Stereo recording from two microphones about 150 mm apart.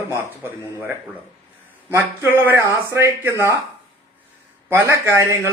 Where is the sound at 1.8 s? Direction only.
15° right (ahead or behind).